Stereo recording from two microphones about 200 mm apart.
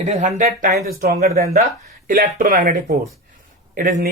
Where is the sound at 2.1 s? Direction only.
45° right (ahead or behind).